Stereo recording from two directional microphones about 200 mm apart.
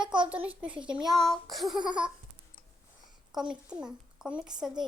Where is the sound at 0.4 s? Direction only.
5° right (ahead or behind).